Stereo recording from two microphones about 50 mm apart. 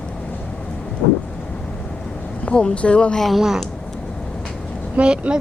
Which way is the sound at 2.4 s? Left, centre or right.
Left.